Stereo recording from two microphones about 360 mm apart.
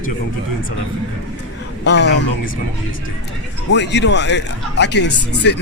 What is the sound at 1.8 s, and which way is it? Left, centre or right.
Speech, left.